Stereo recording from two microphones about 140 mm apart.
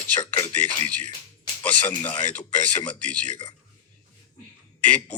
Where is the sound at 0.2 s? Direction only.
25° left (ahead or behind).